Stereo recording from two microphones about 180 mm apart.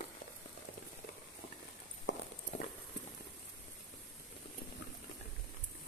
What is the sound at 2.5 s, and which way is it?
Clip-clop, 40° left (ahead or behind).